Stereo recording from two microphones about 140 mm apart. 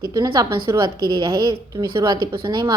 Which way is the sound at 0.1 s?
25° right (ahead or behind).